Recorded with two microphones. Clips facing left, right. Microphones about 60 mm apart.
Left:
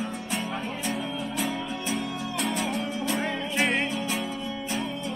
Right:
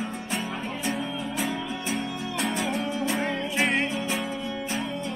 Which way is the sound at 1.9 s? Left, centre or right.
Centre.